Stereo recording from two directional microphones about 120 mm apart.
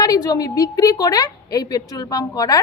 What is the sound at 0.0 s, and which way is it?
A woman's voice, 30° left (ahead or behind).